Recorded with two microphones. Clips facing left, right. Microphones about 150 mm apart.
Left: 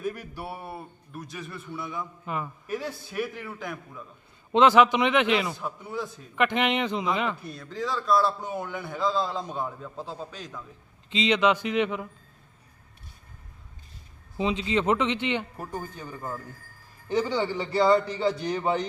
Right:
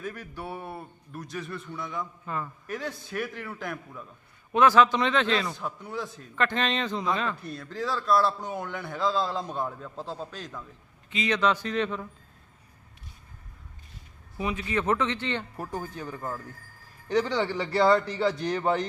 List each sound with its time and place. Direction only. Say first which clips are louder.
0.0 s a man's voice: left 3 dB; 10° left (ahead or behind)
4.5 s speech: left 2 dB; 20° left (ahead or behind)
5.5 s a man's voice: left 1 dB; 5° left (ahead or behind)
6.3 s speech: left 3 dB; 15° left (ahead or behind)
7.4 s a man's voice: even; centre (ahead or behind)
11.1 s speech: left 3 dB; 20° left (ahead or behind)
14.3 s speech: left 3 dB; 20° left (ahead or behind)
15.5 s a man's voice: right 1 dB; centre (ahead or behind)